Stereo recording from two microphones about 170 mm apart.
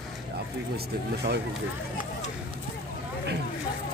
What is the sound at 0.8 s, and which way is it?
Speech, 70° right (ahead or behind).